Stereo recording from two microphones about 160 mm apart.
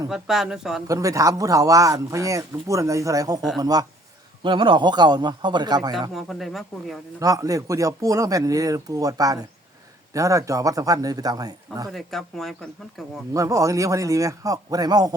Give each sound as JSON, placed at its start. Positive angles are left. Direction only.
{"t": 0.1, "sound": "speech", "side_deg": 0}
{"t": 0.9, "sound": "speech", "side_deg": -20}
{"t": 6.1, "sound": "speech", "side_deg": 0}
{"t": 7.2, "sound": "speech", "side_deg": -20}
{"t": 11.9, "sound": "speech", "side_deg": 0}
{"t": 13.3, "sound": "speech", "side_deg": -20}